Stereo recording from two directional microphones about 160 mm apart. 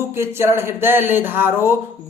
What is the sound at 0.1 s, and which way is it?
A man's voice, 15° right (ahead or behind).